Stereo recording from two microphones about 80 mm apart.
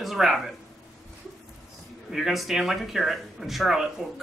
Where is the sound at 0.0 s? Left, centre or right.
Centre.